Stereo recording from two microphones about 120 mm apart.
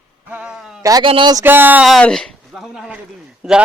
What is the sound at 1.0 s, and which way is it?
Speech, 45° right (ahead or behind).